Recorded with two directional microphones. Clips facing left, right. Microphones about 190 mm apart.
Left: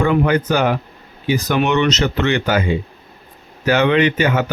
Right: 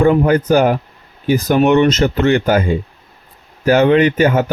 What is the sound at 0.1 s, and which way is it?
A man's voice, 40° right (ahead or behind).